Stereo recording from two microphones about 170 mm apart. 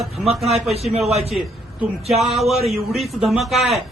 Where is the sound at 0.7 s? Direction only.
40° right (ahead or behind).